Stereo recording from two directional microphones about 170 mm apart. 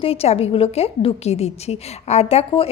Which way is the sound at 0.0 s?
35° left (ahead or behind).